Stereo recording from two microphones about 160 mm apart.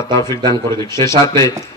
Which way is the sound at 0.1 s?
20° left (ahead or behind).